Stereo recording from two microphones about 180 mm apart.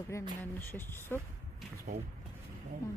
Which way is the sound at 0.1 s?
10° left (ahead or behind).